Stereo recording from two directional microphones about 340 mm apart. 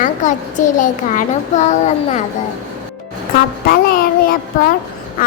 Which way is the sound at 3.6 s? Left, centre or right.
Left.